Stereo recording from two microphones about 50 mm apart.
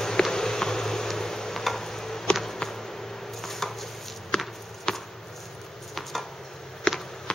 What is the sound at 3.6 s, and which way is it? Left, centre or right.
Chopping, centre.